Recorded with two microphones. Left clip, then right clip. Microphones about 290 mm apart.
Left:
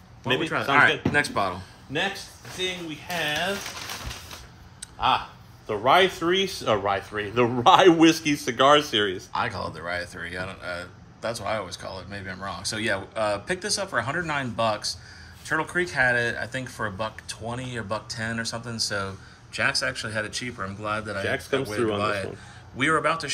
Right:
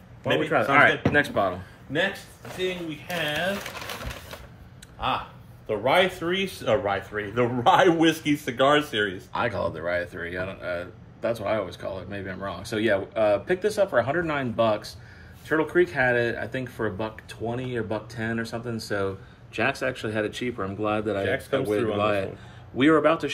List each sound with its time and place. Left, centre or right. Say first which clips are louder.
0.2 s a man's voice: right 2 dB; centre
5.7 s speech: left 2 dB; centre
9.3 s speech: right 2 dB; centre
21.2 s speech: right 1 dB; left
22.0 s speech: right 2 dB; centre